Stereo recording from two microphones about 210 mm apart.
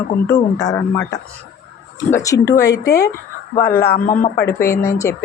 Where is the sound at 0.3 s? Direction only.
15° left (ahead or behind).